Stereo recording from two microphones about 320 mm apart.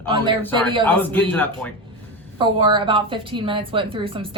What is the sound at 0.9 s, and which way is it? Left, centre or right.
Speech, centre.